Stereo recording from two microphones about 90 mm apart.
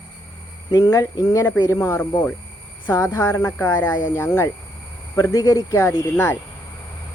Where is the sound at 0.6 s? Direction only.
50° left (ahead or behind); by 4.5 s 30° left (ahead or behind).